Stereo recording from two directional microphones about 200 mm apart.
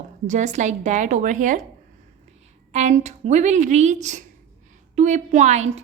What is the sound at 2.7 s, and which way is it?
A woman's voice, 35° right (ahead or behind).